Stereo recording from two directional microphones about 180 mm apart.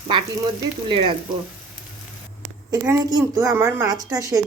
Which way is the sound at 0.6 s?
25° right (ahead or behind).